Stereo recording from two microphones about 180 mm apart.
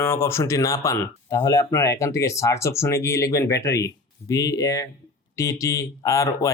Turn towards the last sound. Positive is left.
turn(degrees=20)  # may be behind; listen again after turning